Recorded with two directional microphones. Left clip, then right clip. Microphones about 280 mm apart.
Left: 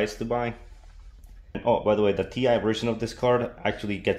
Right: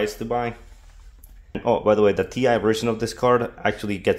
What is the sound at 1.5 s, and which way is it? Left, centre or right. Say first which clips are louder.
Speech: right 3 dB; right.